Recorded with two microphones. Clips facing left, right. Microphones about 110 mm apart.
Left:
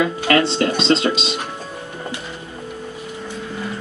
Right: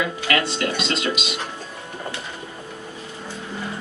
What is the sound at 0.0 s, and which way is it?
Speech, 30° left (ahead or behind).